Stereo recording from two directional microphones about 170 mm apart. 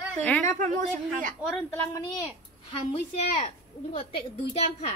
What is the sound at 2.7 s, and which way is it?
Speech, 30° left (ahead or behind).